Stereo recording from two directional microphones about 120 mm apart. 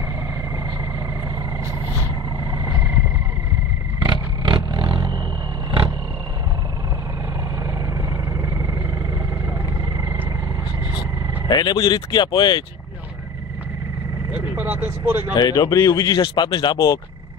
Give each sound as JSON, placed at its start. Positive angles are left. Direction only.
{"t": 2.6, "sound": "a sound", "side_deg": -20}
{"t": 4.0, "sound": "vehicle", "side_deg": -40}
{"t": 5.7, "sound": "roar", "side_deg": -40}
{"t": 8.4, "sound": "vehicle", "side_deg": -25}
{"t": 11.4, "sound": "speech", "side_deg": 35}
{"t": 14.3, "sound": "speech", "side_deg": -15}
{"t": 15.3, "sound": "speech", "side_deg": 35}
{"t": 16.2, "sound": "speech", "side_deg": 40}